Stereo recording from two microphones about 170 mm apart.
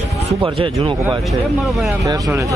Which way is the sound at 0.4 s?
30° right (ahead or behind).